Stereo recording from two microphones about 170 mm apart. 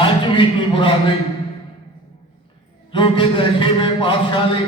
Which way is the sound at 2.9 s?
30° left (ahead or behind).